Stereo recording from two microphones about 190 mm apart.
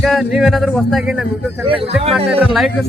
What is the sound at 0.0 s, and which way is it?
A man's voice, centre (ahead or behind).